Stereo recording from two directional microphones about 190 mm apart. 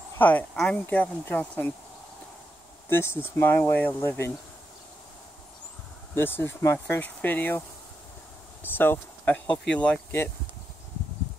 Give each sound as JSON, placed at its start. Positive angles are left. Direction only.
{"t": 0.2, "sound": "speech", "side_deg": 10}
{"t": 2.9, "sound": "speech", "side_deg": 10}
{"t": 6.1, "sound": "speech", "side_deg": 10}
{"t": 8.7, "sound": "speech", "side_deg": 10}